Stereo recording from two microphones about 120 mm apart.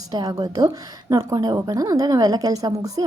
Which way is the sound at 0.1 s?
30° right (ahead or behind).